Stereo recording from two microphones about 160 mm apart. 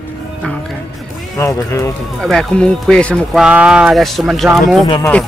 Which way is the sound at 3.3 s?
5° right (ahead or behind).